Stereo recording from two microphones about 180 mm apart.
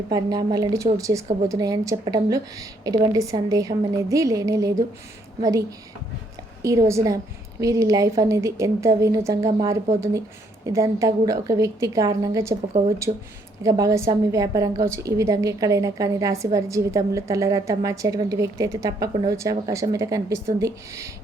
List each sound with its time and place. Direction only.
0.1 s a woman's voice: 20° right (ahead or behind)
13.6 s a woman's voice: 20° right (ahead or behind)